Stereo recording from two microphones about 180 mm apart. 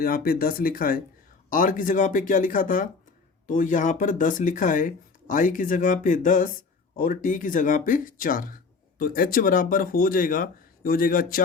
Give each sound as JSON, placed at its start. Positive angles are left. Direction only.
{"t": 0.0, "sound": "speech", "side_deg": 55}